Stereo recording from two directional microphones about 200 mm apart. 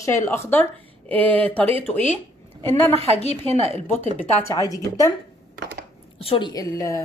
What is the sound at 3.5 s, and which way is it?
Speech, 30° right (ahead or behind).